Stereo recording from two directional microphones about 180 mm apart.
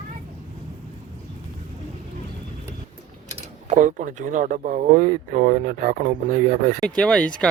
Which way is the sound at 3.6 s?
45° right (ahead or behind).